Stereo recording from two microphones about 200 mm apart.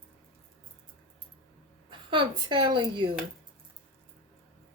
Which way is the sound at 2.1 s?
25° right (ahead or behind).